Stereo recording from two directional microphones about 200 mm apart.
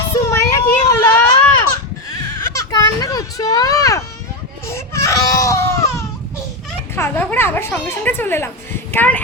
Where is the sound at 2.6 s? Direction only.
20° left (ahead or behind).